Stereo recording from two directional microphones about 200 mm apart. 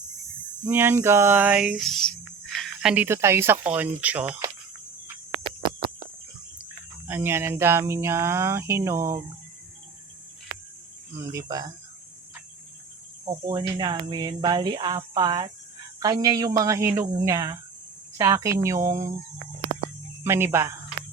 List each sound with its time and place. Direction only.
0.7 s speech: 10° right (ahead or behind)
7.1 s speech: 10° right (ahead or behind)
11.2 s speech: 15° right (ahead or behind)
13.2 s speech: 20° right (ahead or behind)
20.2 s speech: 10° right (ahead or behind)